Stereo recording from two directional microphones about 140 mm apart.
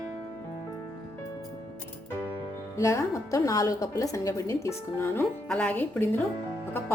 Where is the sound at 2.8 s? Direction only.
20° left (ahead or behind).